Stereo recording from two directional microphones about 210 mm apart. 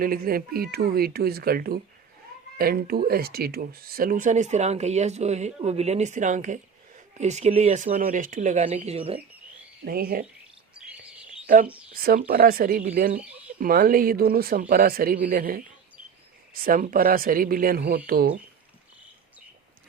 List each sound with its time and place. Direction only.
0.0 s speech: 45° right (ahead or behind); by 9.2 s 30° right (ahead or behind)
9.8 s speech: 45° right (ahead or behind)
12.0 s speech: 45° right (ahead or behind)
16.6 s speech: 40° right (ahead or behind)